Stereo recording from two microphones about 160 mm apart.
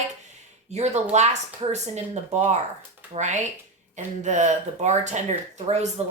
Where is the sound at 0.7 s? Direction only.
45° right (ahead or behind).